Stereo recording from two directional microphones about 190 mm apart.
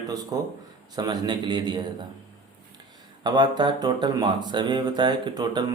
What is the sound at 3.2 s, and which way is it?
Speech, 25° right (ahead or behind).